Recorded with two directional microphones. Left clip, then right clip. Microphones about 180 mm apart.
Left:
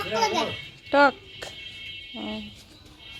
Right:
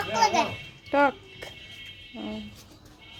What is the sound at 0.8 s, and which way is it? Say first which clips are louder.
Music: left 4 dB; centre (ahead or behind).